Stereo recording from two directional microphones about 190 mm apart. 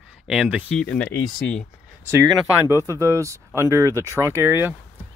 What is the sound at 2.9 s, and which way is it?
Speech, 15° right (ahead or behind).